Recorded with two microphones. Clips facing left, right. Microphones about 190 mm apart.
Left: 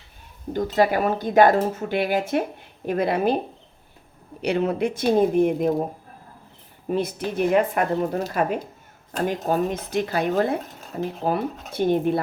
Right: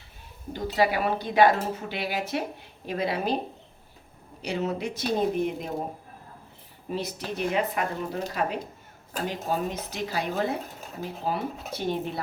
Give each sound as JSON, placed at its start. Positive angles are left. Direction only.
{"t": 0.5, "sound": "speech", "side_deg": 50}
{"t": 4.4, "sound": "speech", "side_deg": 60}
{"t": 6.8, "sound": "speech", "side_deg": 50}